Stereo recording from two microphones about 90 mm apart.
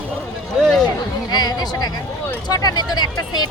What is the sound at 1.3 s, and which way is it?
Speech, 50° left (ahead or behind).